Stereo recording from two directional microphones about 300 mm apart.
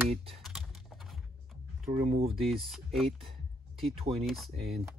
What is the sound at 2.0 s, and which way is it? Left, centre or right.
Speech, centre.